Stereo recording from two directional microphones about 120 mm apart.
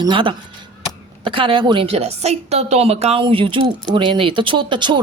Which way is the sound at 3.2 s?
45° right (ahead or behind).